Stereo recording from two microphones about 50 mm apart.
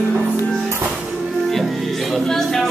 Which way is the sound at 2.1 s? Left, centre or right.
Centre.